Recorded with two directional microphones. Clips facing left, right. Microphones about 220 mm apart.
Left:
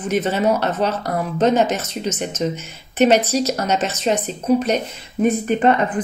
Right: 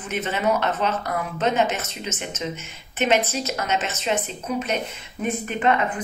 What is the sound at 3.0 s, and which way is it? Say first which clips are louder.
Speech: left 7 dB; 40° left (ahead or behind).